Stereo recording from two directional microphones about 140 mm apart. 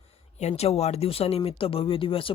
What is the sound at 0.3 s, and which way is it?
Speech, 50° left (ahead or behind).